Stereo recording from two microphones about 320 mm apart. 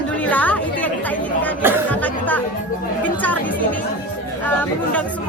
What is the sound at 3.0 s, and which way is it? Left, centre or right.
Speech, centre.